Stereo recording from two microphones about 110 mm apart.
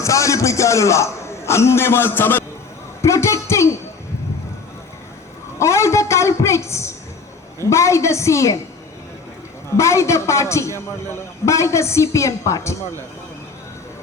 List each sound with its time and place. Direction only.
0.0 s a man's voice: 30° left (ahead or behind)
5.5 s a woman's voice: 25° left (ahead or behind)
9.7 s a woman's voice: 25° left (ahead or behind)